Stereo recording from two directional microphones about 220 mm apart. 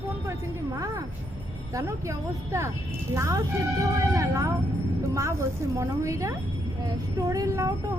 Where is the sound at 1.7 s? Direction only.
15° right (ahead or behind).